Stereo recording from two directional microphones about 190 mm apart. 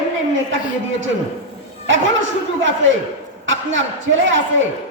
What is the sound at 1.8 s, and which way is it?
A man's voice, 80° right.